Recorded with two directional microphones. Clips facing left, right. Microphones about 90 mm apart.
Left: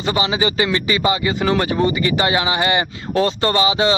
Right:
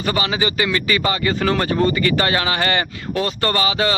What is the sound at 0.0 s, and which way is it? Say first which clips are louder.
Speech: left 2 dB; 20° left (ahead or behind).